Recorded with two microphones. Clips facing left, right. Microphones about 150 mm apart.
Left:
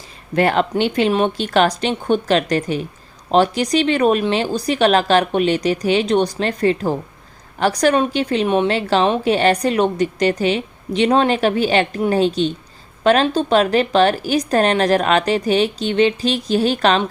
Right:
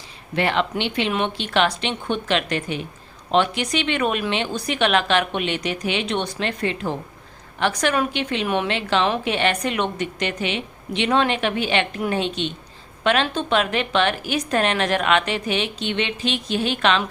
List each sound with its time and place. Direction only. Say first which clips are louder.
0.3 s a woman's voice: left 6 dB; 40° left (ahead or behind)